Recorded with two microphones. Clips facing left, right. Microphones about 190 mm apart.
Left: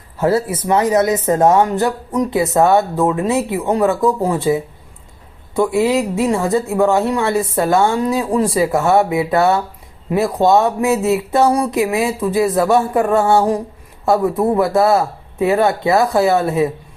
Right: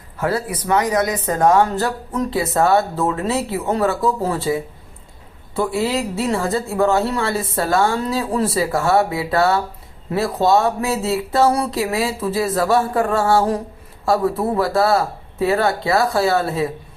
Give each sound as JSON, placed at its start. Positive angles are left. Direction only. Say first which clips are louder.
{"t": 0.2, "sound": "speech", "louder": "left 5 dB", "side_deg": 25}
{"t": 5.5, "sound": "speech", "louder": "left 5 dB", "side_deg": 15}